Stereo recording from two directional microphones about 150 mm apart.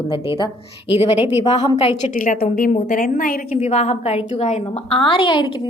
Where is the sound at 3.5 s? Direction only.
50° left (ahead or behind).